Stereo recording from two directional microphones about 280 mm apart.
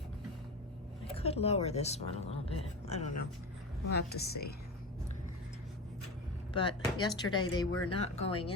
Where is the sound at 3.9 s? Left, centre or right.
Left.